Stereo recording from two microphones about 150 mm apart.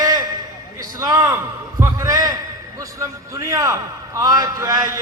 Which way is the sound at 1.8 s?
20° right (ahead or behind).